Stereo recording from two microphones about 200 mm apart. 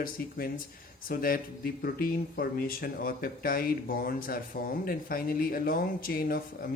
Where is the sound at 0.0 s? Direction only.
45° left (ahead or behind).